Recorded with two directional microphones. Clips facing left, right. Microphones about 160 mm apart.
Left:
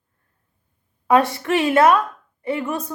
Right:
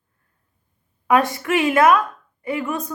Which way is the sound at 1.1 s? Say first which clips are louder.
Left 1 dB; 30° left (ahead or behind).